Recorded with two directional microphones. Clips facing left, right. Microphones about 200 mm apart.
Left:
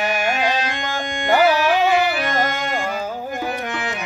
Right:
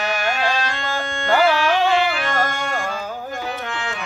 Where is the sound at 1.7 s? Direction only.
5° left (ahead or behind).